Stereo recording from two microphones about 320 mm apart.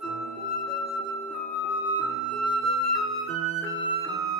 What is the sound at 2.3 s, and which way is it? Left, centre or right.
Flute, left.